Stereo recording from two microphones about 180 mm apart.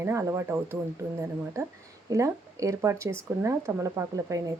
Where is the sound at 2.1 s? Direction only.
20° right (ahead or behind).